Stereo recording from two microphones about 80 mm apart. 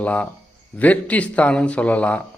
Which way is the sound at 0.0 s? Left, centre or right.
Centre.